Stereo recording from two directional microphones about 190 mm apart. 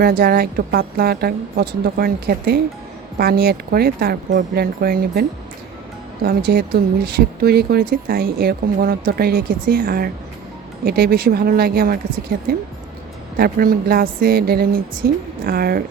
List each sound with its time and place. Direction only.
0.0 s speech: 50° right (ahead or behind)
6.2 s speech: 55° right (ahead or behind)